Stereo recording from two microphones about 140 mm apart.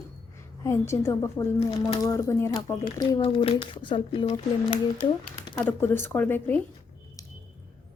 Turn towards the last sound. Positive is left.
turn(degrees=25)  # may be behind; listen again after turning